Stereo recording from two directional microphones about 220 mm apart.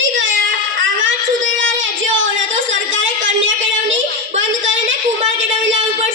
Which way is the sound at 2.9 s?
60° right (ahead or behind).